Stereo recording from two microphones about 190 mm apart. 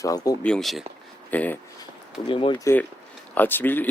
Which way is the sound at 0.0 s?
20° left (ahead or behind).